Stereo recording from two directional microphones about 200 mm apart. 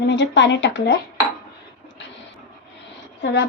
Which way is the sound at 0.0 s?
60° left (ahead or behind).